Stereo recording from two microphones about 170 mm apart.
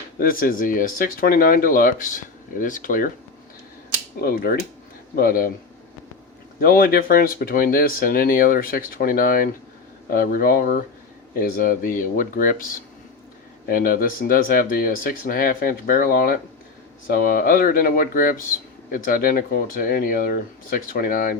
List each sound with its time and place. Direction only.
0.2 s speech: 60° left (ahead or behind)
4.2 s speech: 60° left (ahead or behind)
6.6 s speech: 60° left (ahead or behind)